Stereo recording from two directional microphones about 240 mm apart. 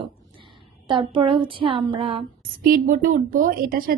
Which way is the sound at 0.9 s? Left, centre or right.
Centre.